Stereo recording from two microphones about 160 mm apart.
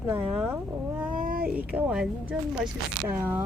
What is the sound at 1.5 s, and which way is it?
A woman's voice, 10° right (ahead or behind).